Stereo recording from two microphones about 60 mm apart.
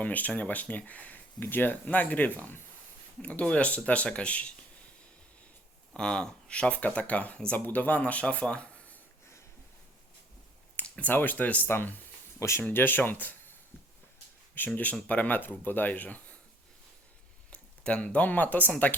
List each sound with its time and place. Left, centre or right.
0.0 s speech: left
5.9 s speech: centre
10.8 s a sound: centre
11.1 s speech: left
12.4 s speech: left
12.7 s speech: left
14.7 s speech: left
17.5 s speech: left